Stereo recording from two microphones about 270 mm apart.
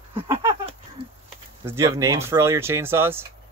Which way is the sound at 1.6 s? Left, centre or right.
Centre.